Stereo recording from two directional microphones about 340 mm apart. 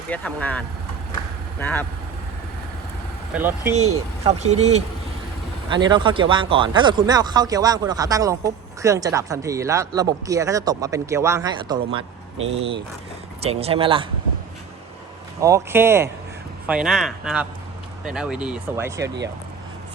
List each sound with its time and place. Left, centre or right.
0.1 s speech: centre
3.3 s speech: centre
4.2 s speech: centre
15.4 s speech: centre